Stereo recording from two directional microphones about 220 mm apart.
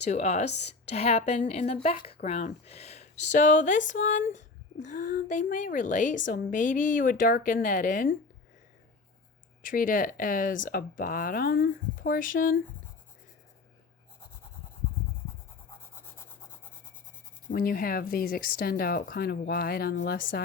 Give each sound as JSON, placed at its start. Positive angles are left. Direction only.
{"t": 0.0, "sound": "speech", "side_deg": 30}
{"t": 9.6, "sound": "speech", "side_deg": 40}
{"t": 16.1, "sound": "rub", "side_deg": 10}
{"t": 17.5, "sound": "speech", "side_deg": 40}